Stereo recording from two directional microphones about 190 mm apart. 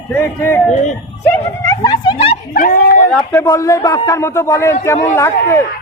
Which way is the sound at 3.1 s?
10° left (ahead or behind).